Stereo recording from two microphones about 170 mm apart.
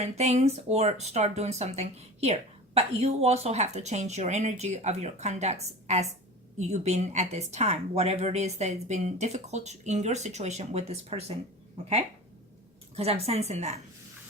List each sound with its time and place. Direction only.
0.0 s speech: 40° right (ahead or behind)
13.0 s speech: 35° right (ahead or behind)